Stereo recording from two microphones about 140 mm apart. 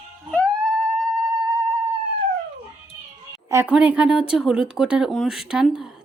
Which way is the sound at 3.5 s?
20° right (ahead or behind).